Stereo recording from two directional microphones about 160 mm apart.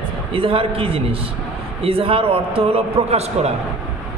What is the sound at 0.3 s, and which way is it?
A man's voice, 35° right (ahead or behind).